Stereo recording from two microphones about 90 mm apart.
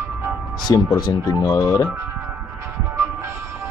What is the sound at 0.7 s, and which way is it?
Speech, 45° left (ahead or behind).